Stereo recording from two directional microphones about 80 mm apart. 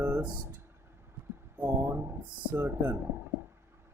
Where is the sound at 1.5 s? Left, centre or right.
Right.